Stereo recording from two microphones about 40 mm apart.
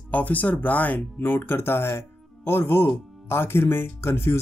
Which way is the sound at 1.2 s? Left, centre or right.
Left.